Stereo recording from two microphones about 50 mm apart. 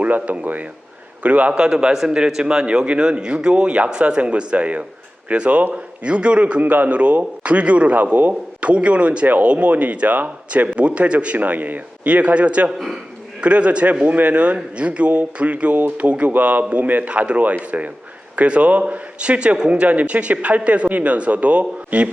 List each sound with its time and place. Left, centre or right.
0.0 s a man's voice: right
1.5 s a man's voice: centre